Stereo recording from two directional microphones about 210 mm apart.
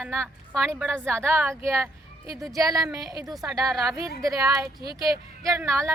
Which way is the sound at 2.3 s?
Centre (ahead or behind).